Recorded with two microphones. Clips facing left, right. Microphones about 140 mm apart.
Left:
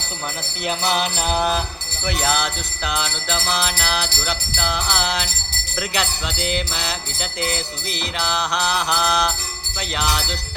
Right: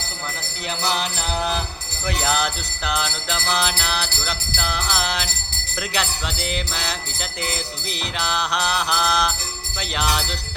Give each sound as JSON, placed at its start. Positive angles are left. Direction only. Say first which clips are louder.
{"t": 2.2, "sound": "music", "louder": "even", "side_deg": 0}